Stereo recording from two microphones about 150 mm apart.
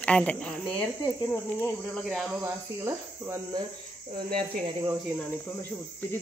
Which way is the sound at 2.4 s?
15° right (ahead or behind).